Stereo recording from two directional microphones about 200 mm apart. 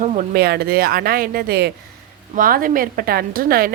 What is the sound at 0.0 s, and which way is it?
A woman's voice, 40° right (ahead or behind).